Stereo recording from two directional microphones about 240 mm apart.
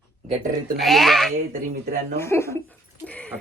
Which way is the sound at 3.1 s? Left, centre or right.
Centre.